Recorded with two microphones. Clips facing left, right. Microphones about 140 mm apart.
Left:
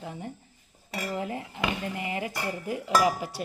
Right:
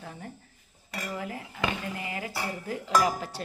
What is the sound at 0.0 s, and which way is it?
Speech, 20° left (ahead or behind).